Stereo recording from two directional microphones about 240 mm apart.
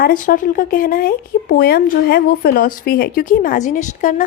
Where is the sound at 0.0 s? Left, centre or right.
Left.